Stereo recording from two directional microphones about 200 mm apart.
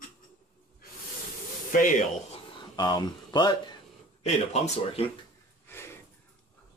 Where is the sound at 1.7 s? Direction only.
40° left (ahead or behind).